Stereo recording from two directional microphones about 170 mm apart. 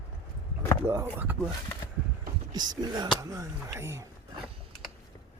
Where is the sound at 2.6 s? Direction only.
25° right (ahead or behind).